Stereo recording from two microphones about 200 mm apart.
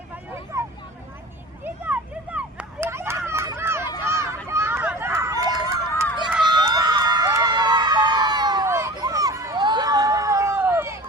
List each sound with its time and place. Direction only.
0.5 s vehicle: 15° right (ahead or behind)
1.6 s a sound: 10° right (ahead or behind)
4.4 s run: 15° right (ahead or behind)
6.4 s emergency vehicle: 20° right (ahead or behind)